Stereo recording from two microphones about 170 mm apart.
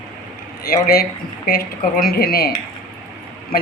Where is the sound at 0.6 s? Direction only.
60° left (ahead or behind).